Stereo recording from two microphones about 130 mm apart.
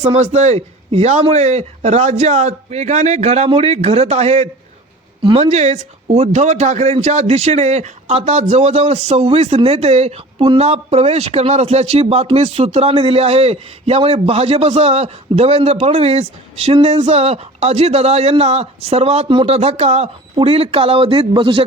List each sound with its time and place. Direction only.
0.0 s speech: 55° right (ahead or behind)